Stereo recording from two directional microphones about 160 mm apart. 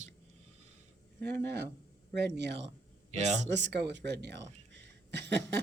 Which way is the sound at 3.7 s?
90° right.